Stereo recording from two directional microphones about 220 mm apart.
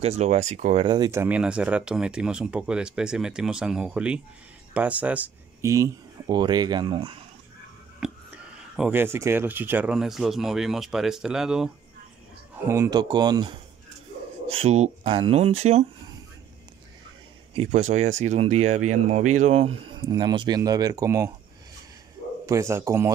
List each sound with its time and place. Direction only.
0.0 s speech: 30° right (ahead or behind)
8.0 s a sound: 5° right (ahead or behind)
8.7 s speech: 5° right (ahead or behind)
14.5 s speech: 30° right (ahead or behind)
17.6 s speech: 30° right (ahead or behind); by 21.3 s 15° right (ahead or behind)
22.5 s speech: 15° right (ahead or behind)